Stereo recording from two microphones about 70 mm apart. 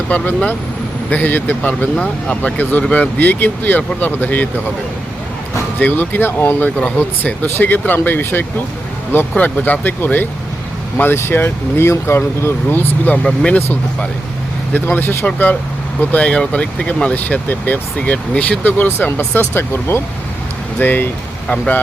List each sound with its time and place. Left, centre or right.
0.1 s speech: left
5.8 s speech: left
13.2 s speech: centre
14.7 s speech: left
16.0 s speech: centre
21.4 s speech: centre